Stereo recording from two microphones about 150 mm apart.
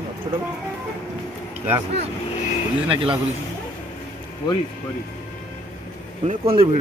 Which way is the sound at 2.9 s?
35° right (ahead or behind).